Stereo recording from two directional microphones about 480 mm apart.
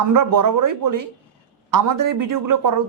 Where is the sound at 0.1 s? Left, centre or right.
Right.